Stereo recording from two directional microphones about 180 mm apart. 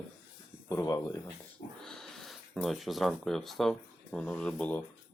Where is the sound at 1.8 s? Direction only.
Centre (ahead or behind).